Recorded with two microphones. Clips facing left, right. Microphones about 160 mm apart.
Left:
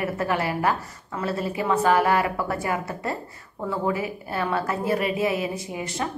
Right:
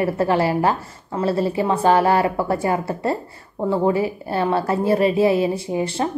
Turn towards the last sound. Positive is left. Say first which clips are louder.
# right 7 dB
turn(degrees=-30)  # may be behind; listen again after turning